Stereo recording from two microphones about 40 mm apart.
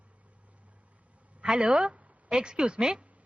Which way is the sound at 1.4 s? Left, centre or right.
Right.